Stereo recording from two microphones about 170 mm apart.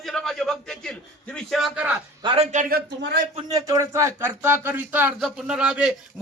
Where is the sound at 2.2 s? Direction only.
30° right (ahead or behind).